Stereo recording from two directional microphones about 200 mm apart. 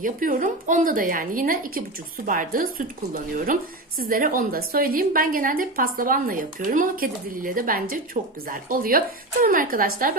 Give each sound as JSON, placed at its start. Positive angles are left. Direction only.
{"t": 0.0, "sound": "a woman's voice", "side_deg": -40}